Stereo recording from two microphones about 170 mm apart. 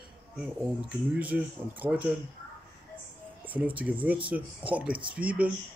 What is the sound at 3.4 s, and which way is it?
Speech, 10° right (ahead or behind).